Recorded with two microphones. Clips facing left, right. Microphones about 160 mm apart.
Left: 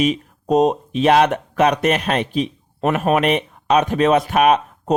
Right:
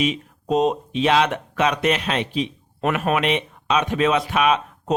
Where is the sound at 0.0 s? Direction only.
45° left (ahead or behind).